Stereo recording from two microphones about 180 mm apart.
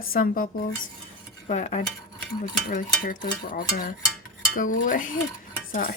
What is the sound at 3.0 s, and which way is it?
Dishes, 50° left (ahead or behind).